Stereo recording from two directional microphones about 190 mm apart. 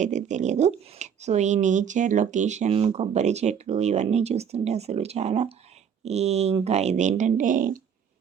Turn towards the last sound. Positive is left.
turn(degrees=-45)  # may be behind; listen again after turning